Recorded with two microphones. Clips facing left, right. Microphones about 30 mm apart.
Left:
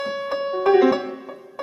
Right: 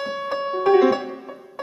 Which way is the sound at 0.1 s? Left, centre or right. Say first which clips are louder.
Even; centre.